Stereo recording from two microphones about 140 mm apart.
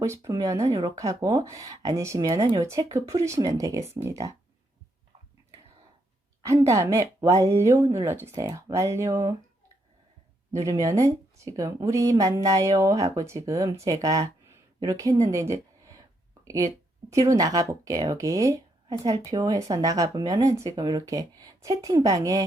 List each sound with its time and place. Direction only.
0.0 s speech: 20° right (ahead or behind)
6.4 s speech: 20° right (ahead or behind)
10.5 s speech: 25° right (ahead or behind)
17.1 s speech: 25° right (ahead or behind)